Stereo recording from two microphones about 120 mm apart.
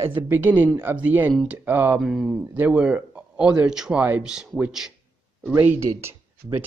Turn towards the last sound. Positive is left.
turn(degrees=-20)  # may be behind; listen again after turning